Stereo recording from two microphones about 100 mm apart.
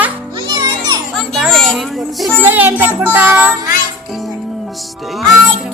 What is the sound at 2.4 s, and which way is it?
A child's voice, 20° right (ahead or behind).